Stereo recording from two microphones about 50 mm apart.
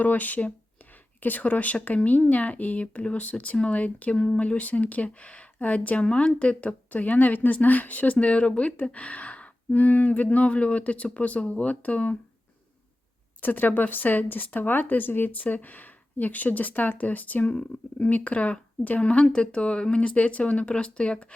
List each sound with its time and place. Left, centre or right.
0.0 s speech: left
13.4 s speech: left